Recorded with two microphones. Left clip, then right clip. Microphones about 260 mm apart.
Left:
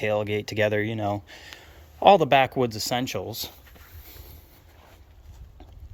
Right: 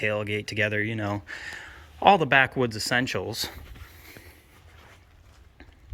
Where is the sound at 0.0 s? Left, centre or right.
Centre.